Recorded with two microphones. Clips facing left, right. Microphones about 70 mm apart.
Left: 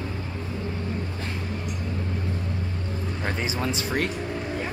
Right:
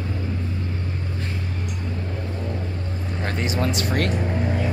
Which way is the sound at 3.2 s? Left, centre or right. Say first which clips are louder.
Right 4 dB; centre.